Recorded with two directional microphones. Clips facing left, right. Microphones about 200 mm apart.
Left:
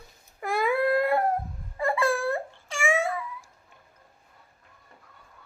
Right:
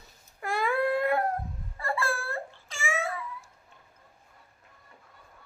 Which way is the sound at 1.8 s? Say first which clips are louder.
Left 7 dB; 15° left (ahead or behind).